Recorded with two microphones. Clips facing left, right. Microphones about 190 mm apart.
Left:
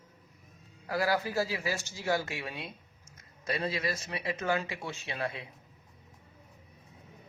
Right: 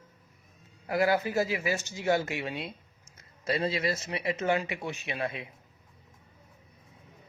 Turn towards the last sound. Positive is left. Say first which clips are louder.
# right 2 dB
turn(degrees=-20)  # may be behind; listen again after turning